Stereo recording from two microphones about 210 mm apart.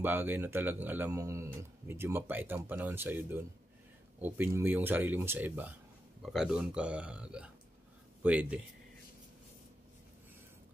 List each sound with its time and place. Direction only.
0.0 s speech: 10° right (ahead or behind)